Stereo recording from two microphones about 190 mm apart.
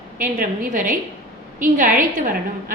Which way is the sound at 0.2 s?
45° right (ahead or behind).